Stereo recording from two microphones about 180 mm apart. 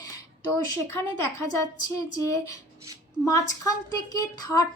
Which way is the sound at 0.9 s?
15° left (ahead or behind).